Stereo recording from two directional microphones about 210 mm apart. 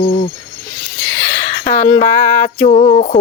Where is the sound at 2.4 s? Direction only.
35° left (ahead or behind).